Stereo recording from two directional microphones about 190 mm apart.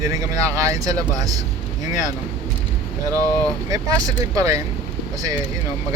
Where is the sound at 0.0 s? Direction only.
15° right (ahead or behind).